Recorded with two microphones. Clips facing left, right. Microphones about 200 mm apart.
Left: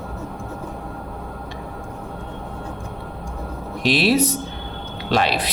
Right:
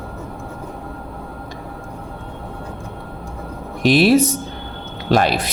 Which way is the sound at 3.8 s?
50° right (ahead or behind).